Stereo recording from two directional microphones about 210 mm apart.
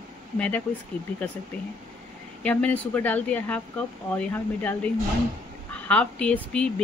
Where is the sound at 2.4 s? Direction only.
5° left (ahead or behind).